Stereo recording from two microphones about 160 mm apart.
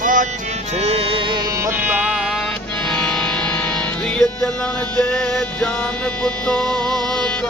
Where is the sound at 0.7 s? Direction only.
40° right (ahead or behind).